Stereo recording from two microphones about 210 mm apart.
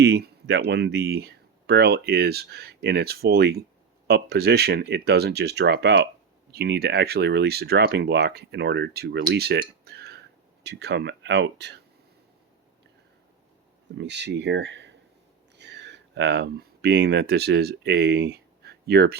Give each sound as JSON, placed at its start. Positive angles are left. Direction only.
{"t": 0.0, "sound": "speech", "side_deg": -55}
{"t": 14.0, "sound": "speech", "side_deg": -55}